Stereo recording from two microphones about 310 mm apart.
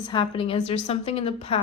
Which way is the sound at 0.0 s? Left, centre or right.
Centre.